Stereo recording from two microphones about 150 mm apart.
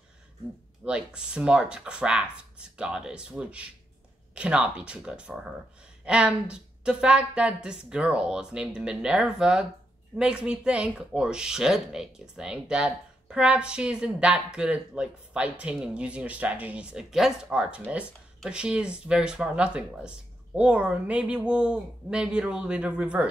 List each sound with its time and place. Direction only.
0.8 s speech: 5° right (ahead or behind)